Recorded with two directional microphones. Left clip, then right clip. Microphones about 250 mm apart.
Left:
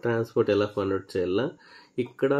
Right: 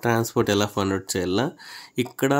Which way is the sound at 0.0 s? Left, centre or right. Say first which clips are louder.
Right 3 dB; right.